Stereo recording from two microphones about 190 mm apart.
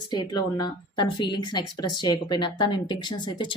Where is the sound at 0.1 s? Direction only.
20° left (ahead or behind).